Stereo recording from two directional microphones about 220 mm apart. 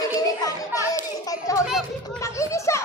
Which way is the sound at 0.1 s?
15° left (ahead or behind).